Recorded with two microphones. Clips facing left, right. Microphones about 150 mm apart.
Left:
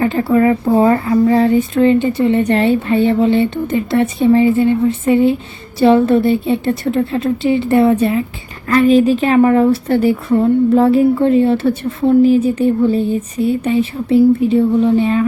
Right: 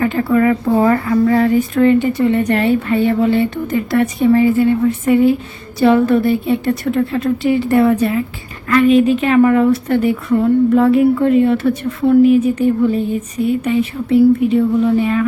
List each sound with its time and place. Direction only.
0.0 s a woman's voice: 30° left (ahead or behind)